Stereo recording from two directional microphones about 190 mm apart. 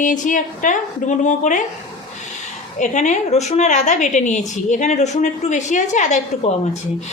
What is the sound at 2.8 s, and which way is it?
A woman's voice, 40° left (ahead or behind).